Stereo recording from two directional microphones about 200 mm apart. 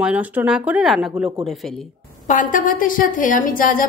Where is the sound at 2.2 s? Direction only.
40° left (ahead or behind).